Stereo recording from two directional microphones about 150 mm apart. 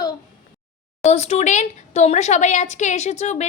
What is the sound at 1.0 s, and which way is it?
Speech, 45° left (ahead or behind).